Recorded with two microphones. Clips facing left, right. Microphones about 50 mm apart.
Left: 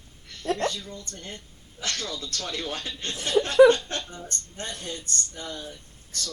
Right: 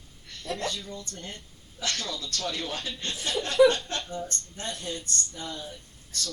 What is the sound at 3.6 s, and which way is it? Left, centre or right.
Chuckle, left.